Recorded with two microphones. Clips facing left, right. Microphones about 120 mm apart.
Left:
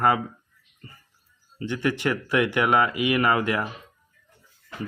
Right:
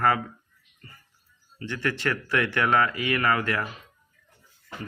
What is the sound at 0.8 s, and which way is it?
Music, 25° left (ahead or behind).